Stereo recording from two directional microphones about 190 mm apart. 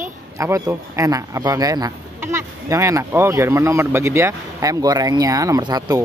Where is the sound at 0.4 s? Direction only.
15° right (ahead or behind).